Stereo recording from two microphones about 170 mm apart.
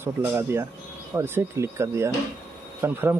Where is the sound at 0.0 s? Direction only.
15° right (ahead or behind).